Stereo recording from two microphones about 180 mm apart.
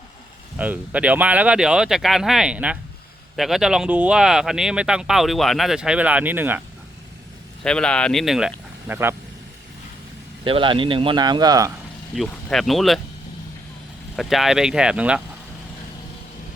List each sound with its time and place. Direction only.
0.6 s speech: 10° right (ahead or behind)
7.6 s speech: 5° left (ahead or behind); by 9.1 s 10° right (ahead or behind)
10.4 s speech: 30° right (ahead or behind)
12.1 s speech: centre (ahead or behind)
14.2 s speech: centre (ahead or behind)